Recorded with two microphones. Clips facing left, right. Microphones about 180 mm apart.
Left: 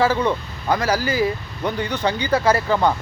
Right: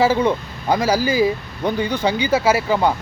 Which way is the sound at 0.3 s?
10° right (ahead or behind).